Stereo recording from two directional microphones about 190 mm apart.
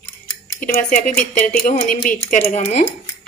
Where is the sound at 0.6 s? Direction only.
45° left (ahead or behind).